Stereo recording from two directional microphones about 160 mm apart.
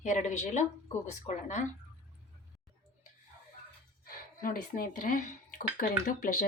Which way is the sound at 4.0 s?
65° left (ahead or behind).